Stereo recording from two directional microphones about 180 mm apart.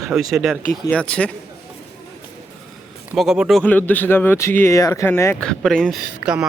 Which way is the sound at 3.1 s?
5° right (ahead or behind).